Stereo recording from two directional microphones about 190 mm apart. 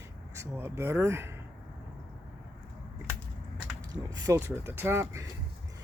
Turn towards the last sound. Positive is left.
turn(degrees=-15)  # may be behind; listen again after turning